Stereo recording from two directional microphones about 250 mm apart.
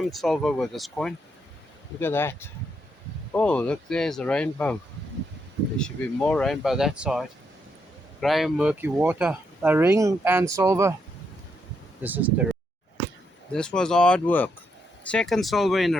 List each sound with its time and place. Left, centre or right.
0.0 s speech: centre
5.8 s speech: centre
12.0 s speech: centre
13.5 s speech: centre